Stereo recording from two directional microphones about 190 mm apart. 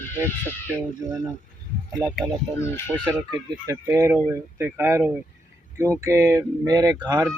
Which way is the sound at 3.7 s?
15° right (ahead or behind).